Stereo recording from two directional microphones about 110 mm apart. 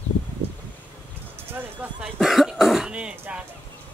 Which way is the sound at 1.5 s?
20° right (ahead or behind).